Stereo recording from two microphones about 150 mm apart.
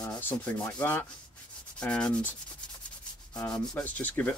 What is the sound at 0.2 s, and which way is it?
Sanding, 15° left (ahead or behind).